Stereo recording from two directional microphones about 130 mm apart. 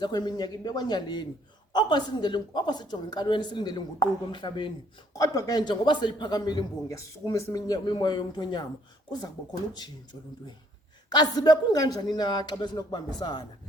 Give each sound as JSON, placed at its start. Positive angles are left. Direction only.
{"t": 0.0, "sound": "a man's voice", "side_deg": 30}
{"t": 5.1, "sound": "a man's voice", "side_deg": 25}
{"t": 9.7, "sound": "a man's voice", "side_deg": 30}